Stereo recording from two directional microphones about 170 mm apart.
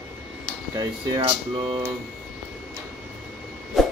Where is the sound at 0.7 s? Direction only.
30° right (ahead or behind).